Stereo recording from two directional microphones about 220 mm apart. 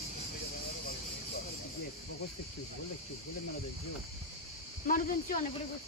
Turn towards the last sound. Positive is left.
turn(degrees=35)  # may be behind; listen again after turning